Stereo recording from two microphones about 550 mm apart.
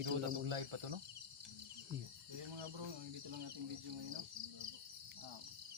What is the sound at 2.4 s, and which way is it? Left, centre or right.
Speech, right.